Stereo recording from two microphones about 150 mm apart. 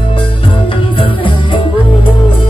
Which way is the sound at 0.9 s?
35° left (ahead or behind).